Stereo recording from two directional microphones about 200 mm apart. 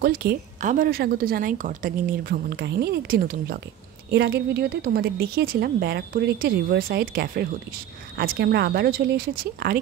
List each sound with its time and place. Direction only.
0.0 s a woman's voice: 50° right (ahead or behind)